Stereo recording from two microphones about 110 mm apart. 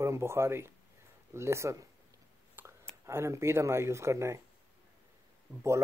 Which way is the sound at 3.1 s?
25° right (ahead or behind).